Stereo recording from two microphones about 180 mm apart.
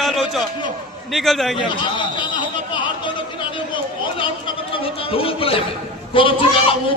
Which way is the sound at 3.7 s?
30° left (ahead or behind).